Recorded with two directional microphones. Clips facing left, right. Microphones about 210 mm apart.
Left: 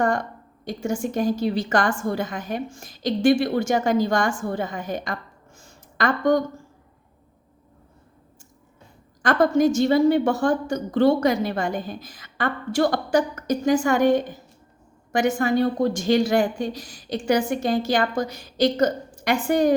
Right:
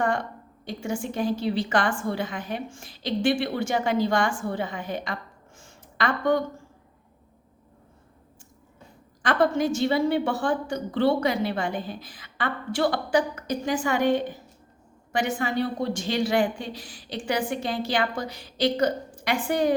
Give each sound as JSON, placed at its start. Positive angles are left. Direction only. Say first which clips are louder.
{"t": 0.0, "sound": "a woman's voice", "louder": "left 3 dB", "side_deg": 45}
{"t": 5.5, "sound": "a sound", "louder": "left 3 dB", "side_deg": 40}
{"t": 9.2, "sound": "a woman's voice", "louder": "left 4 dB", "side_deg": 45}